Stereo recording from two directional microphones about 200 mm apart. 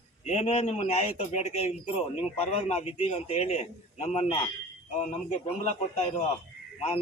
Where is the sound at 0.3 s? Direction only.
35° left (ahead or behind).